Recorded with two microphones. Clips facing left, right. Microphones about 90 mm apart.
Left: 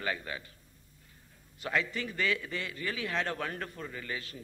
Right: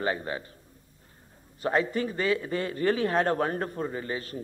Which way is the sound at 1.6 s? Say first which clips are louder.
Right 7 dB; 35° right (ahead or behind).